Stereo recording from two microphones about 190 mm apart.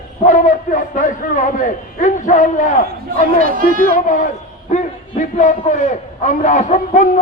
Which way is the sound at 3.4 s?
50° right (ahead or behind).